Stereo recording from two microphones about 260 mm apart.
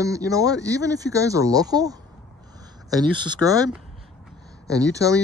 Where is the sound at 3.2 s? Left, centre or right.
Centre.